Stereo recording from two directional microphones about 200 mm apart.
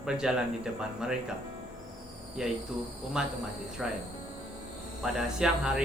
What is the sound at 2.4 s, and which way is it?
Speech, 5° right (ahead or behind).